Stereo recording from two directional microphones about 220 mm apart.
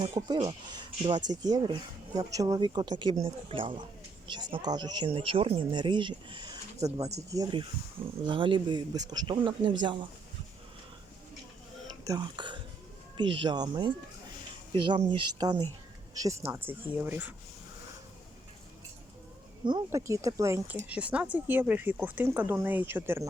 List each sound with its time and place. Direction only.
0.0 s speech: 20° right (ahead or behind)
12.0 s speech: 20° right (ahead or behind)
19.6 s speech: 15° right (ahead or behind)